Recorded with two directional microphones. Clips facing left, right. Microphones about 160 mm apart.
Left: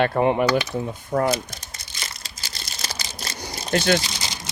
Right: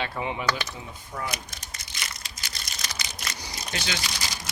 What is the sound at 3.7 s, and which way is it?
Speech, 55° left (ahead or behind).